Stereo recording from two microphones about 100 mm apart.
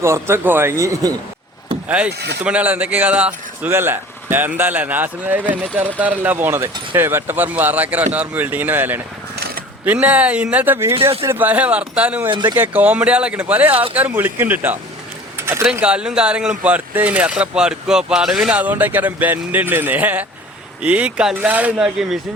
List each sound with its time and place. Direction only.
0.0 s speech: 25° right (ahead or behind)
1.9 s speech: 15° right (ahead or behind)
12.3 s speech: 50° right (ahead or behind)
12.5 s speech: 15° right (ahead or behind)
15.4 s a sound: 25° right (ahead or behind)
15.8 s speech: 10° right (ahead or behind)